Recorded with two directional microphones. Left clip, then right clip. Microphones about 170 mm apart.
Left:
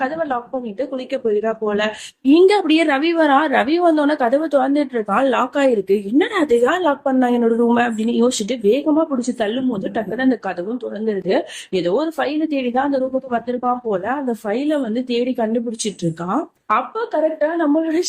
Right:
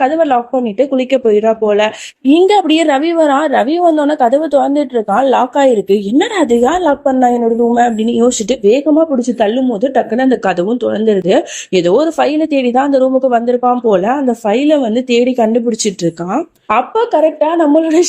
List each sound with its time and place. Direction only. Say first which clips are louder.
0.0 s speech: right 10 dB; 30° right (ahead or behind); by 7.3 s 15° right (ahead or behind)
7.9 s speech: right 6 dB; 25° right (ahead or behind); by 18.0 s 40° right (ahead or behind)